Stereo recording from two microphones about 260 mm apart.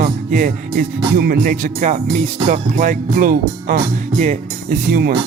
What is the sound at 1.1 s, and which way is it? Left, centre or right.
Music, right.